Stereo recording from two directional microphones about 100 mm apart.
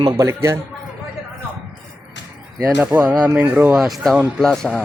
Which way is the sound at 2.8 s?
20° right (ahead or behind).